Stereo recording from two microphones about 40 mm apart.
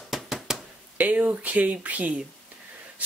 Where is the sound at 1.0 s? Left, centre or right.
Right.